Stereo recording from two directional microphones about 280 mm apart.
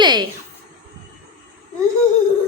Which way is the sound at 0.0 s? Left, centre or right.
Centre.